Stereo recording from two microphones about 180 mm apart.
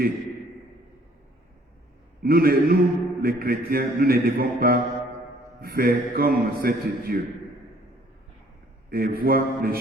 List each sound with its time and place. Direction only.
2.2 s mantra: 55° right (ahead or behind)
8.9 s mantra: 55° right (ahead or behind)